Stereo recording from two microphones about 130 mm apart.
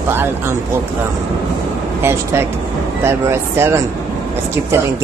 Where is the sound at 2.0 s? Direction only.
20° right (ahead or behind).